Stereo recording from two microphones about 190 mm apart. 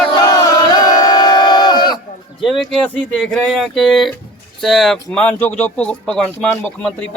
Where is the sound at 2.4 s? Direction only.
Centre (ahead or behind).